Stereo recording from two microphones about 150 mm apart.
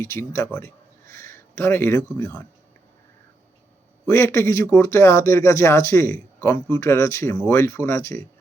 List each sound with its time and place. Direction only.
0.0 s speech: 20° left (ahead or behind)
4.0 s speech: 15° left (ahead or behind)